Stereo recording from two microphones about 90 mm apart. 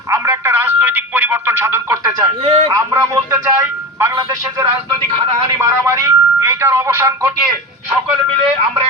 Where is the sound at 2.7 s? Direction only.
30° right (ahead or behind).